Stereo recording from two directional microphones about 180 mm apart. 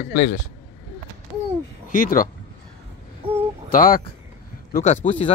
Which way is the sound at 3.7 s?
50° left (ahead or behind).